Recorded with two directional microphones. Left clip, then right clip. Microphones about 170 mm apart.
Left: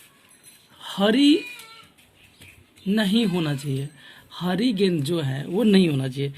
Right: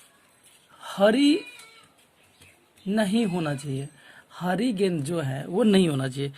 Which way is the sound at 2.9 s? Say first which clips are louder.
Left 2 dB; 45° right (ahead or behind).